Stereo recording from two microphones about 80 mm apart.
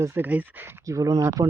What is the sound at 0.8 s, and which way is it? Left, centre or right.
Speech, right.